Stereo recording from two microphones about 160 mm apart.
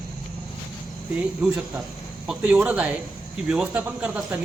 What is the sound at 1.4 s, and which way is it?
A man's voice, 10° right (ahead or behind).